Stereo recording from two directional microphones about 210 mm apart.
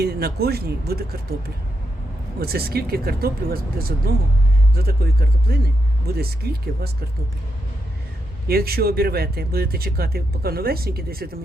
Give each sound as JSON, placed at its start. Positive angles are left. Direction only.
{"t": 0.0, "sound": "speech", "side_deg": -50}
{"t": 2.4, "sound": "speech", "side_deg": -45}
{"t": 8.4, "sound": "speech", "side_deg": -45}